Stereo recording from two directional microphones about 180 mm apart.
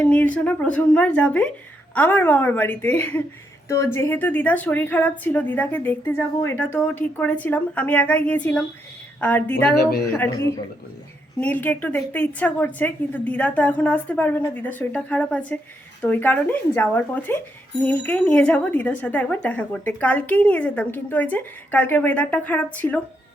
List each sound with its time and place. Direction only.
0.0 s speech: 10° left (ahead or behind)
9.7 s speech: 60° left (ahead or behind)
11.3 s speech: 10° left (ahead or behind)